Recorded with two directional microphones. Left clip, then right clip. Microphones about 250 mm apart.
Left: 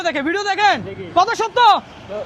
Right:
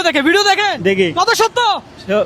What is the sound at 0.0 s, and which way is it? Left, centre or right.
Speech, right.